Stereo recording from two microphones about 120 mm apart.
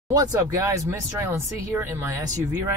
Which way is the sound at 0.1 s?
30° right (ahead or behind).